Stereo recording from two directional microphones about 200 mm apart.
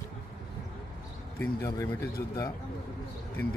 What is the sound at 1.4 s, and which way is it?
Speech, 15° left (ahead or behind).